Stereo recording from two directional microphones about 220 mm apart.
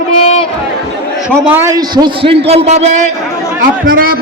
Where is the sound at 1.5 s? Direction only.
10° right (ahead or behind).